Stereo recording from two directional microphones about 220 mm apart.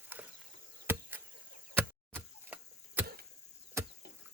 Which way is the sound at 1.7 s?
10° right (ahead or behind).